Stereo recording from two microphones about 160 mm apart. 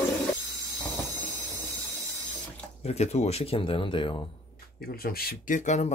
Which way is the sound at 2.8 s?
40° left (ahead or behind).